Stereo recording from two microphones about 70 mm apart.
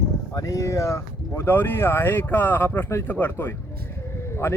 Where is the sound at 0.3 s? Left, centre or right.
Left.